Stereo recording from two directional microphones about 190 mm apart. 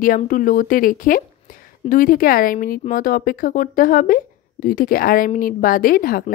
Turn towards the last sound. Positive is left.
turn(degrees=50)  # may be behind; listen again after turning